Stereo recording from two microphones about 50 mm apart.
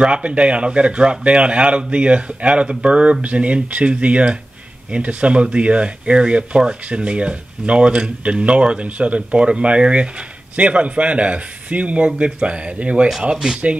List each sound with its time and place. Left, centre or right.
0.0 s speech: right
13.3 s speech: centre